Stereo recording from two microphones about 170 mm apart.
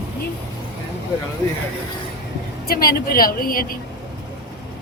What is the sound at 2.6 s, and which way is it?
A woman's voice, 60° left (ahead or behind).